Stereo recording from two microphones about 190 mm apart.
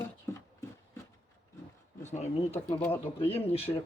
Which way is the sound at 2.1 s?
35° left (ahead or behind).